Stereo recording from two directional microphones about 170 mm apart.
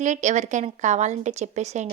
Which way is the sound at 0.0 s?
45° right (ahead or behind).